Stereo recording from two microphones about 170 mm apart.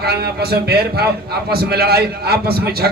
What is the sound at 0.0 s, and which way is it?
A man's voice, 70° right (ahead or behind).